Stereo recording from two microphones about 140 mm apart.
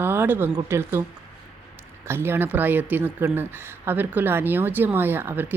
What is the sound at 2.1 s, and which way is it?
A woman's voice, 15° right (ahead or behind).